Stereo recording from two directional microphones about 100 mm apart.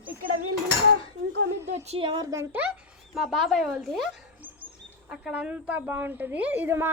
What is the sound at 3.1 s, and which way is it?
Speech, centre (ahead or behind).